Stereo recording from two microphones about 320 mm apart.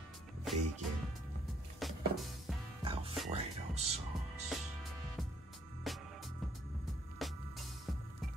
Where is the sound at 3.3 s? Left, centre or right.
Centre.